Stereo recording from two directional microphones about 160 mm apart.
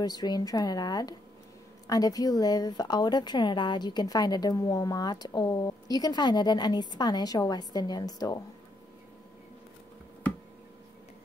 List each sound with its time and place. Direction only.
0.0 s a woman's voice: 25° left (ahead or behind)